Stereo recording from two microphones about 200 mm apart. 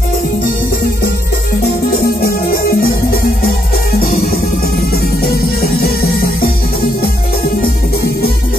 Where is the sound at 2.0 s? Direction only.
50° left (ahead or behind).